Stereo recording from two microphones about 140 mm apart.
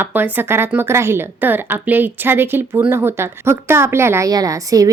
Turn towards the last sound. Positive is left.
turn(degrees=-25)  # may be behind; listen again after turning